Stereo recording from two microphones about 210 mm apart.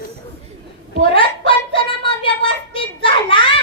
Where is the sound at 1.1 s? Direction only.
25° left (ahead or behind).